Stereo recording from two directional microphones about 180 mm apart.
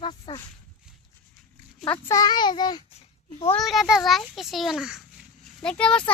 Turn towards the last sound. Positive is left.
turn(degrees=5)  # may be behind; listen again after turning